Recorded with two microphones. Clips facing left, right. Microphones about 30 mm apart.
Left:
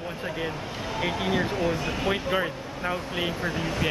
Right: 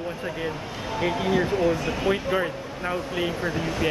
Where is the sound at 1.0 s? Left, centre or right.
Centre.